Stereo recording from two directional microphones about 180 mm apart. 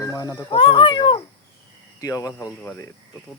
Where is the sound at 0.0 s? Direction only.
20° left (ahead or behind).